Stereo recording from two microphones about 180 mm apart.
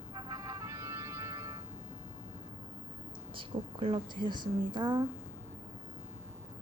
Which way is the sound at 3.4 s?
30° right (ahead or behind).